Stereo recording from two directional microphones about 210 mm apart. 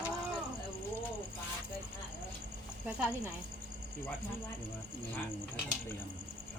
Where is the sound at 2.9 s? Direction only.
5° right (ahead or behind).